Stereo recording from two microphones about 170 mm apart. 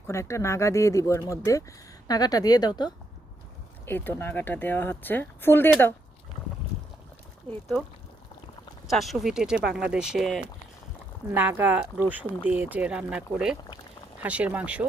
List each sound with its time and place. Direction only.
0.1 s speech: 15° left (ahead or behind)
3.8 s speech: 10° left (ahead or behind)
7.5 s speech: 10° left (ahead or behind)
8.9 s speech: centre (ahead or behind)
11.3 s speech: 10° right (ahead or behind)